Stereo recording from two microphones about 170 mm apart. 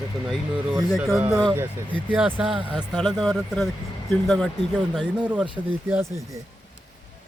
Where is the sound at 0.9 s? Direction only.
Centre (ahead or behind).